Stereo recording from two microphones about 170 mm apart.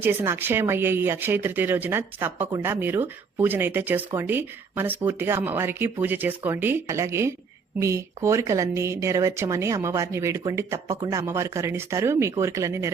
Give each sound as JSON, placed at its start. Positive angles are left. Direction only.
{"t": 0.0, "sound": "speech", "side_deg": -15}